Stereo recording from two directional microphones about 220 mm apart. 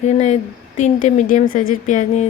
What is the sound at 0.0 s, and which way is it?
Speech, 30° left (ahead or behind).